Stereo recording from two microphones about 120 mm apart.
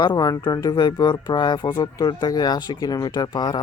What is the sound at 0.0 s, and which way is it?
Speech, 40° left (ahead or behind).